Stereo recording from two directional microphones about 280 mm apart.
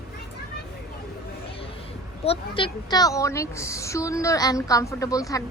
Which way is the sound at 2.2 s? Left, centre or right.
Centre.